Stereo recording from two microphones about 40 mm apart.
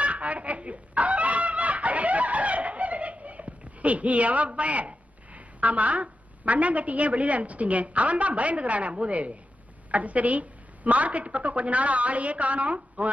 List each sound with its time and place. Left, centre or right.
0.0 s fowl: right
9.8 s a woman's voice: right